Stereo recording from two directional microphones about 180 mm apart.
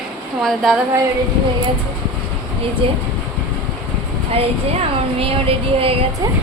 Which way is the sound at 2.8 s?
30° right (ahead or behind).